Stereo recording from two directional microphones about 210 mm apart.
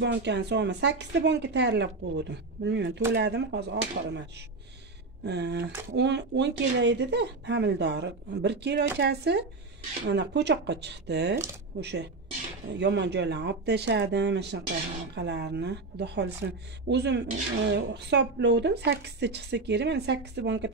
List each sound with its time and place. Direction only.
0.0 s speech: 55° right (ahead or behind)
5.2 s a woman's voice: 55° right (ahead or behind)